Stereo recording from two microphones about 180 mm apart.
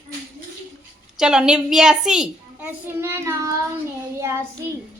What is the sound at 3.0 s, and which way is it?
Child singing, 15° right (ahead or behind).